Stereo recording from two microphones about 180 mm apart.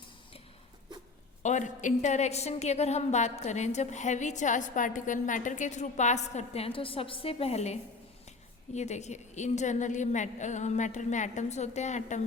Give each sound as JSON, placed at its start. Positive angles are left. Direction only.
{"t": 1.4, "sound": "a woman's voice", "side_deg": 40}